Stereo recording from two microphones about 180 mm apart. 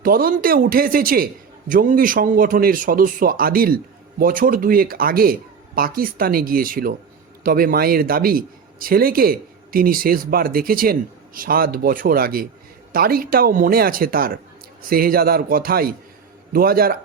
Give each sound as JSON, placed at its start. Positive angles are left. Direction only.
{"t": 0.0, "sound": "speech", "side_deg": -55}